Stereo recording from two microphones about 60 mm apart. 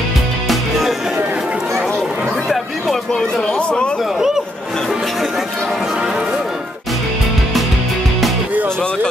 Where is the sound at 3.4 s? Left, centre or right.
Centre.